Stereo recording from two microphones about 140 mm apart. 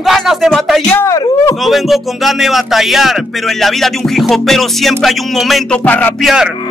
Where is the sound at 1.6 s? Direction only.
Centre (ahead or behind).